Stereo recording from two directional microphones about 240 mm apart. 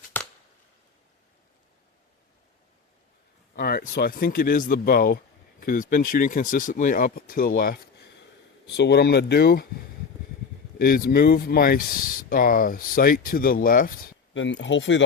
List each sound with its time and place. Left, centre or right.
0.1 s a sound: centre
3.5 s speech: left
10.8 s speech: left
14.3 s speech: left